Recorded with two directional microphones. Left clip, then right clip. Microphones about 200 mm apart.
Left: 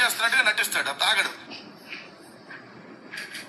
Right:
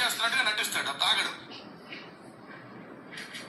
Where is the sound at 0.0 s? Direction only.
25° left (ahead or behind).